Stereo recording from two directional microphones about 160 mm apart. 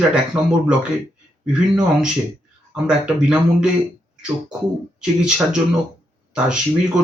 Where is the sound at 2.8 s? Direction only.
5° right (ahead or behind).